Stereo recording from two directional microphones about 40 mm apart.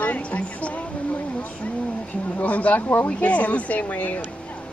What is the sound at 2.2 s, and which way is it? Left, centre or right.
Speech, left.